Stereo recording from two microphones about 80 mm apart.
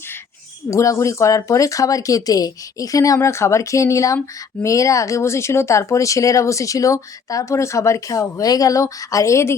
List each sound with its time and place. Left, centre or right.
0.7 s speech: left
3.2 s speech: left